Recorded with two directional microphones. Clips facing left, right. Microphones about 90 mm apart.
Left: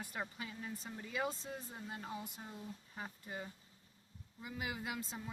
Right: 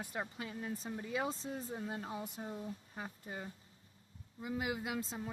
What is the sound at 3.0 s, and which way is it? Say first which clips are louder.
Speech: left 1 dB; 30° right (ahead or behind).